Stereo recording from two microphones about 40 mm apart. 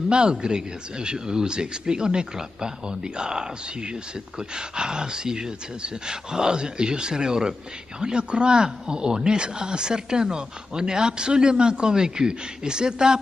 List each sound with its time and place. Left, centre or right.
0.1 s speech: right